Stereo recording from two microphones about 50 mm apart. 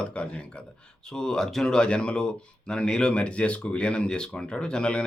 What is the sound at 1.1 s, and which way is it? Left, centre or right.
Speech, centre.